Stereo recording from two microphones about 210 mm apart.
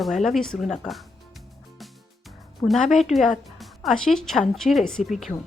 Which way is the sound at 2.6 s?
Centre (ahead or behind).